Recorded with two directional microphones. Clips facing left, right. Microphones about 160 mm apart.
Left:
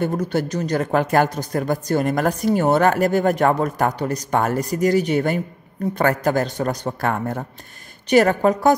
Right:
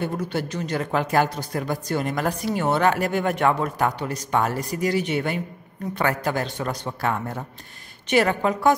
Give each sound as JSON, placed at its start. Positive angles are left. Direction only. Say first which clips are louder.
{"t": 0.0, "sound": "speech", "louder": "left 5 dB", "side_deg": 45}